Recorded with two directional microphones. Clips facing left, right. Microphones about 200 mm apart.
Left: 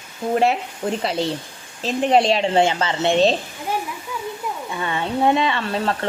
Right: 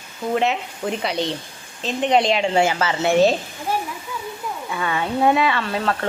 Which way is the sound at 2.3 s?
30° left (ahead or behind).